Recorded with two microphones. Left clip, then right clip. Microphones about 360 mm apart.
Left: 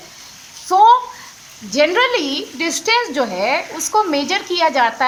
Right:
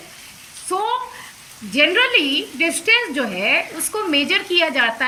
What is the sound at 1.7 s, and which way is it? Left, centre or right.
A woman's voice, centre.